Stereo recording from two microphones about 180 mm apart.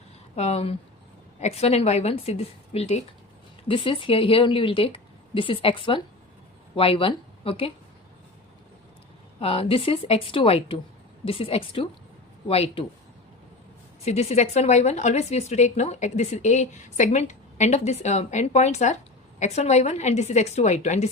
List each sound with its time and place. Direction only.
0.3 s a woman's voice: 35° left (ahead or behind)
9.4 s a woman's voice: 30° left (ahead or behind)
14.0 s a woman's voice: 35° left (ahead or behind)